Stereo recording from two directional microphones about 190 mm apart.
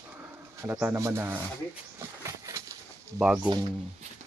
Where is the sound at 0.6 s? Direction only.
10° right (ahead or behind).